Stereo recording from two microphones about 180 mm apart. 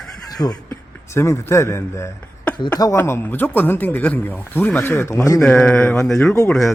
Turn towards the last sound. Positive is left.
turn(degrees=0)  # may be behind; listen again after turning